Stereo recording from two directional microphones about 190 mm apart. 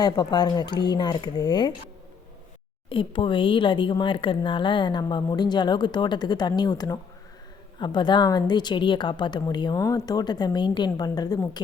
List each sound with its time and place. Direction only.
0.0 s speech: 20° left (ahead or behind)
2.9 s speech: 25° left (ahead or behind)